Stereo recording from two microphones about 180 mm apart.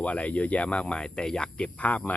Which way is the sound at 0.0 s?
5° left (ahead or behind).